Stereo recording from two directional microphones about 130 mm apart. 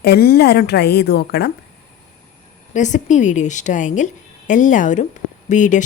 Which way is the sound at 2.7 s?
70° left (ahead or behind).